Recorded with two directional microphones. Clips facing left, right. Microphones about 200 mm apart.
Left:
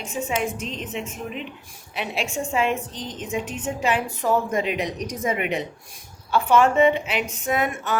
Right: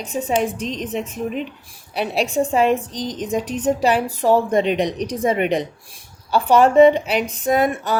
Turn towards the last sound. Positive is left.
turn(degrees=-35)  # may be behind; listen again after turning